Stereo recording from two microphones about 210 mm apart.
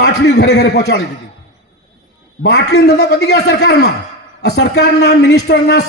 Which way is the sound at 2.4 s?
50° left (ahead or behind).